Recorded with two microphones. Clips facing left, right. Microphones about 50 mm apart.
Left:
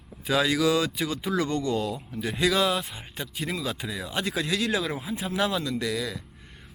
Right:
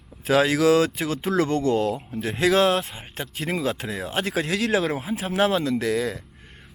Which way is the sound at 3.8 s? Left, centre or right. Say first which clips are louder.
Right 3 dB; right.